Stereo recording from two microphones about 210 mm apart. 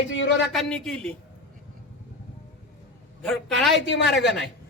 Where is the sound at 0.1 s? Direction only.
55° left (ahead or behind).